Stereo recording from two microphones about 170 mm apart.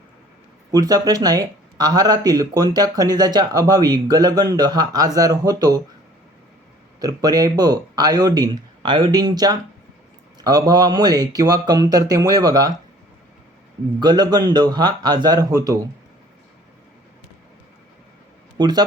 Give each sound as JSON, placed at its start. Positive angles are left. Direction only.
{"t": 0.7, "sound": "speech", "side_deg": -20}
{"t": 7.0, "sound": "speech", "side_deg": -25}
{"t": 14.0, "sound": "speech", "side_deg": -25}
{"t": 18.5, "sound": "speech", "side_deg": -25}